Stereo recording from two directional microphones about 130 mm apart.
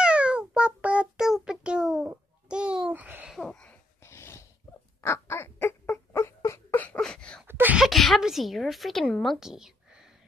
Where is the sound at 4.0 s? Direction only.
20° left (ahead or behind).